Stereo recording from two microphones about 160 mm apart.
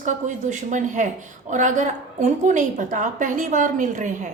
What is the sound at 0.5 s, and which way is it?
A woman's voice, 50° right (ahead or behind).